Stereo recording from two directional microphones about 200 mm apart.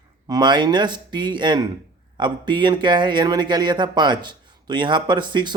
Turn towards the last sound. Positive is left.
turn(degrees=-20)  # may be behind; listen again after turning